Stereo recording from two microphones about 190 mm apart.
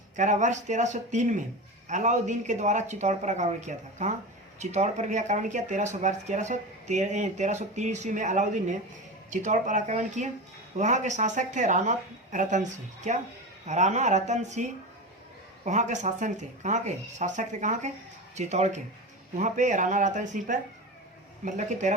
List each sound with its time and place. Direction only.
0.2 s speech: 40° right (ahead or behind)